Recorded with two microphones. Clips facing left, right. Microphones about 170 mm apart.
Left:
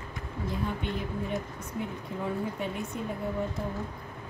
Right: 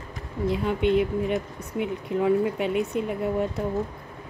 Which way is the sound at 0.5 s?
80° right.